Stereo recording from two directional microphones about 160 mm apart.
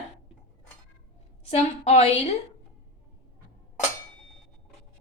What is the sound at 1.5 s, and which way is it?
Speech, 40° left (ahead or behind).